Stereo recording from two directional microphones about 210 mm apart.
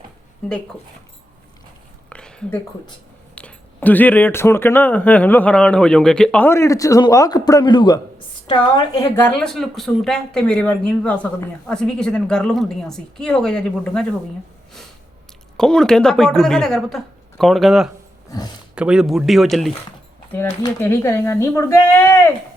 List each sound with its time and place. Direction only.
2.0 s a sound: 5° left (ahead or behind)
3.3 s a woman's voice: 5° left (ahead or behind)
15.5 s a woman's voice: 5° left (ahead or behind)
18.3 s speech: 20° left (ahead or behind)
18.7 s a woman's voice: 5° right (ahead or behind)
20.3 s speech: 15° left (ahead or behind)